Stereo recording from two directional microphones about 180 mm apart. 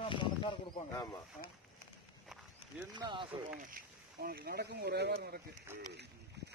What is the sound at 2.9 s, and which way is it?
Speech, 25° right (ahead or behind).